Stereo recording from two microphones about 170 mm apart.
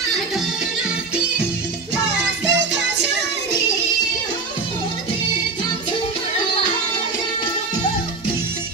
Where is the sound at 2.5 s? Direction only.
90° right.